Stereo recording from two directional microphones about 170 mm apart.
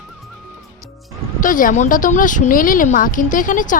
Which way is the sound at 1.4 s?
50° left (ahead or behind).